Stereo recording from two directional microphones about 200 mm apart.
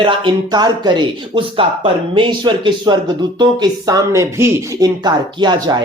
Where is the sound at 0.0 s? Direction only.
25° right (ahead or behind).